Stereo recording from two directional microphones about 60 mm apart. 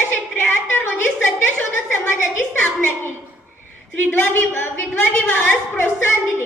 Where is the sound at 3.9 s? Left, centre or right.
Left.